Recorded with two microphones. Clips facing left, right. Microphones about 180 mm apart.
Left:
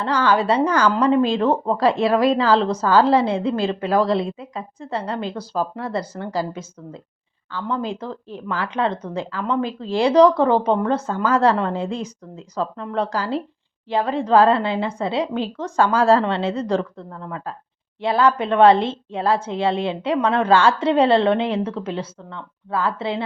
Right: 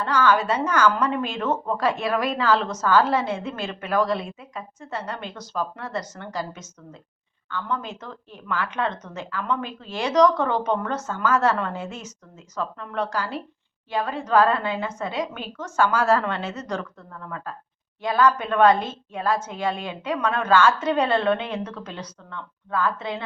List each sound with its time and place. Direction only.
0.0 s a woman's voice: 30° left (ahead or behind)